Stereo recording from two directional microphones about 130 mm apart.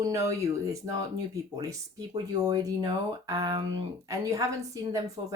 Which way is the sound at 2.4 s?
30° right (ahead or behind).